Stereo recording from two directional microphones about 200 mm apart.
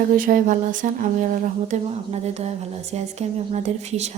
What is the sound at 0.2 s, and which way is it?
A woman's voice, 40° right (ahead or behind).